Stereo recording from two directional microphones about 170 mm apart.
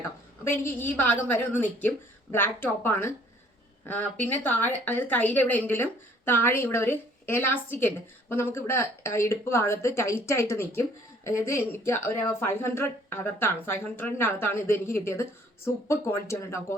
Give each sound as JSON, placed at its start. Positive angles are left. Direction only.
{"t": 0.4, "sound": "a woman's voice", "side_deg": 15}